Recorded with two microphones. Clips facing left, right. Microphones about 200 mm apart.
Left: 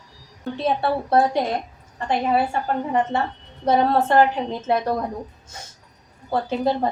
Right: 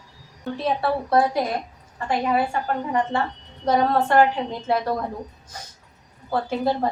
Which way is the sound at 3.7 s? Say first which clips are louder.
Left 1 dB; 25° left (ahead or behind).